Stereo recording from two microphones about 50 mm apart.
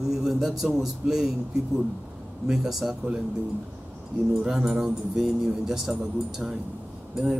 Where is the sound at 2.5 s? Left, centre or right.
Centre.